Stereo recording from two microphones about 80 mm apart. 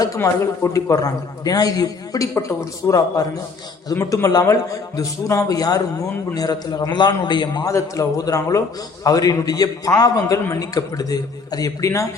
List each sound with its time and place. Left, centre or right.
0.2 s a man's voice: left
4.1 s a man's voice: left
7.6 s a man's voice: left